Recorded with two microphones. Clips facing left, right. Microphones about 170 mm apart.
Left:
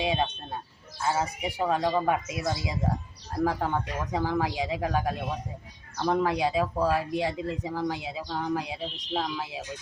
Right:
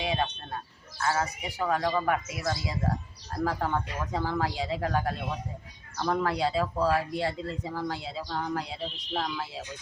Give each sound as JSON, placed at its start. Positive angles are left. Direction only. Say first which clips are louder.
{"t": 0.0, "sound": "speech", "louder": "left 2 dB", "side_deg": 25}